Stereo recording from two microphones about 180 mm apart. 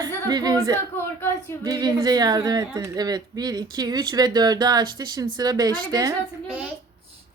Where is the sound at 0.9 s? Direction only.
10° left (ahead or behind).